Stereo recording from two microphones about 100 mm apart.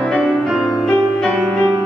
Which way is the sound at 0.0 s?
5° left (ahead or behind).